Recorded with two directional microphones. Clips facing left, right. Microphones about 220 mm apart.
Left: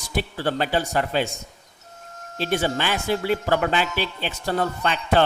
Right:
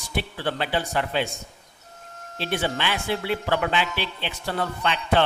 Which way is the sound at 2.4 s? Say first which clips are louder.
Left 3 dB; 45° left (ahead or behind).